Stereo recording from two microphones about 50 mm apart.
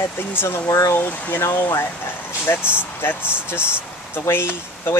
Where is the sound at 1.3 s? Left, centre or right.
Left.